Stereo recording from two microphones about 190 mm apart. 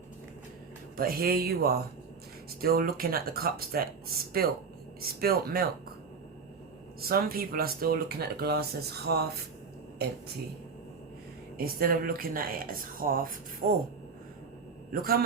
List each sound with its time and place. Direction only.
0.9 s speech: 50° right (ahead or behind)
7.0 s speech: 50° right (ahead or behind)
11.5 s speech: 50° right (ahead or behind)